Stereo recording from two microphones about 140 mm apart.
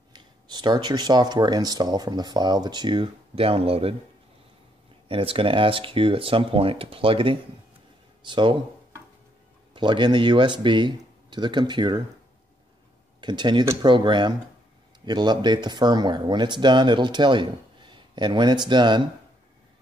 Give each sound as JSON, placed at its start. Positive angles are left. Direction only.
{"t": 0.1, "sound": "speech", "side_deg": -30}
{"t": 5.0, "sound": "speech", "side_deg": -40}
{"t": 9.8, "sound": "speech", "side_deg": -35}
{"t": 13.2, "sound": "speech", "side_deg": -30}